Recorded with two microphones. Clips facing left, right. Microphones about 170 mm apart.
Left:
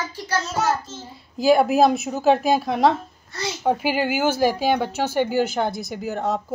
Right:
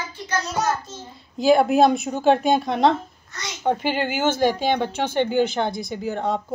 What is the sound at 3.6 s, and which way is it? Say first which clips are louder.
A woman's voice: left 1 dB; 5° left (ahead or behind).